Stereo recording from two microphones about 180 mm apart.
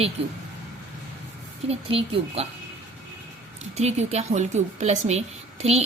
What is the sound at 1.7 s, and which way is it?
Speech, 35° right (ahead or behind).